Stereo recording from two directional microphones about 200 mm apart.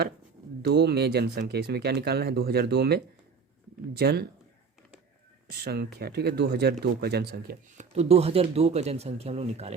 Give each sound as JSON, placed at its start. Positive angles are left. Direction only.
{"t": 0.6, "sound": "speech", "side_deg": -55}
{"t": 5.5, "sound": "speech", "side_deg": -55}
{"t": 7.9, "sound": "speech", "side_deg": -30}